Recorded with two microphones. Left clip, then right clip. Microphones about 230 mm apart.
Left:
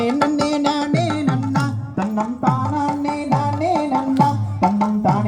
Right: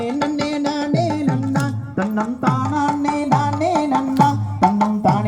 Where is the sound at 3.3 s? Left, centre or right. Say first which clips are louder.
Even; right.